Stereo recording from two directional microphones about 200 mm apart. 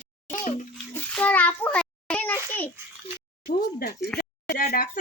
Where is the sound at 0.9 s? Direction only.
5° left (ahead or behind).